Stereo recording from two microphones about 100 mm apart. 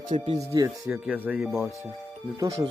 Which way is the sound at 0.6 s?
50° right (ahead or behind).